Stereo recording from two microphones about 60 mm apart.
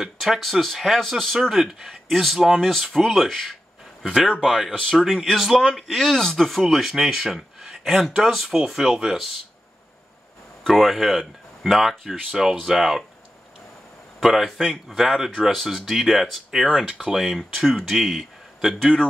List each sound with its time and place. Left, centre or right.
0.0 s a man's voice: centre
4.8 s a man's voice: centre
10.6 s a man's voice: centre
14.2 s a man's voice: centre